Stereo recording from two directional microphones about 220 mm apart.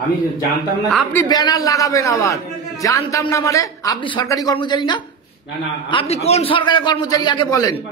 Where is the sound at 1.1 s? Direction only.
15° left (ahead or behind).